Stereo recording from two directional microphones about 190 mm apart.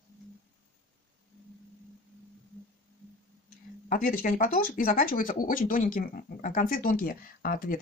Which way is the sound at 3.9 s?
50° left (ahead or behind).